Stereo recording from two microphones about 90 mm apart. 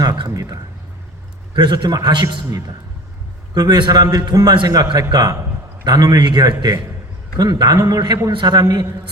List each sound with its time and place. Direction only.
0.0 s a man's voice: 50° right (ahead or behind)
1.5 s a man's voice: 55° right (ahead or behind)
8.5 s a man's voice: 40° right (ahead or behind)